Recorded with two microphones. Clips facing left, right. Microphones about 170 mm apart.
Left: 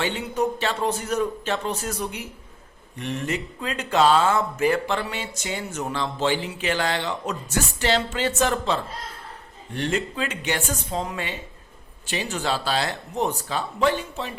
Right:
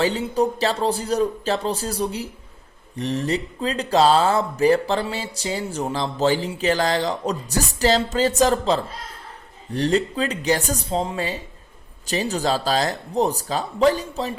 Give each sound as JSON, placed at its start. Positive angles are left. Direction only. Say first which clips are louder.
{"t": 0.0, "sound": "speech", "louder": "right 4 dB", "side_deg": -35}